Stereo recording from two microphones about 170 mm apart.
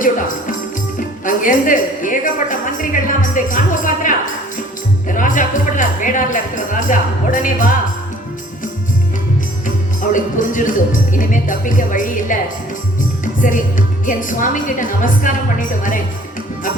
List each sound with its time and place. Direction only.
0.9 s speech: 50° left (ahead or behind)
9.6 s a woman's voice: 50° left (ahead or behind)